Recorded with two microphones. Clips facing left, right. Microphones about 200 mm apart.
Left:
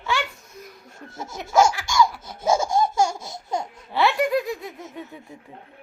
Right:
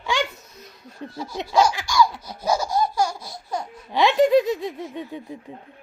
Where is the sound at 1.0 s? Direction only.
20° left (ahead or behind).